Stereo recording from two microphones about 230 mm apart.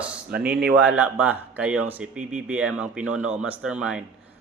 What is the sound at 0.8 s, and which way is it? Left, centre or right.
Speech, centre.